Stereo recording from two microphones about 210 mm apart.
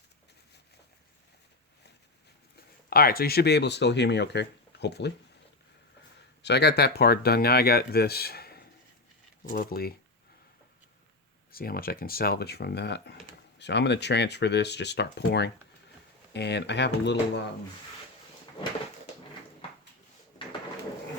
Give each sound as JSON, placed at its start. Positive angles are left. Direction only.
{"t": 2.9, "sound": "speech", "side_deg": 45}
{"t": 6.4, "sound": "speech", "side_deg": 50}
{"t": 11.5, "sound": "speech", "side_deg": 45}